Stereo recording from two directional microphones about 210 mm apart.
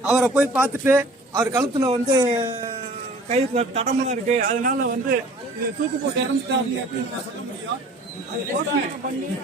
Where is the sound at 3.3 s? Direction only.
30° right (ahead or behind).